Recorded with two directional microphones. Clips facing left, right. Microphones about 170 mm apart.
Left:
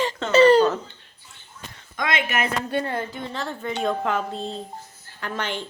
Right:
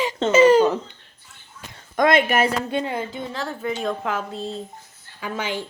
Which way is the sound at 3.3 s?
Centre (ahead or behind).